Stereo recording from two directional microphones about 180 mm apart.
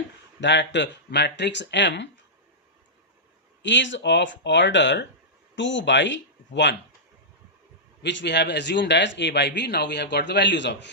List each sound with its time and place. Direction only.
0.3 s speech: 80° left
3.6 s speech: 90° left
8.0 s speech: 75° left (ahead or behind)